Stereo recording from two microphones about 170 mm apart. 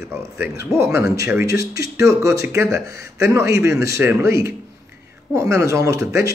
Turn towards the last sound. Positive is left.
turn(degrees=-15)  # may be behind; listen again after turning